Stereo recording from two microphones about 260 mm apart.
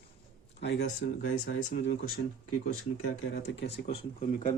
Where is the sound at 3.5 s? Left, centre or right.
Left.